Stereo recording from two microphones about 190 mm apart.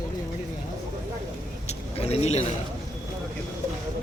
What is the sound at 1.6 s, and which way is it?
Vehicle, 35° left (ahead or behind).